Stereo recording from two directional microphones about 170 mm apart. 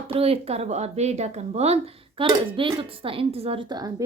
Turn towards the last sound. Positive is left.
turn(degrees=-25)  # may be behind; listen again after turning